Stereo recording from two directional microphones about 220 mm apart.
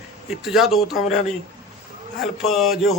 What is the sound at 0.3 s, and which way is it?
Speech, centre (ahead or behind).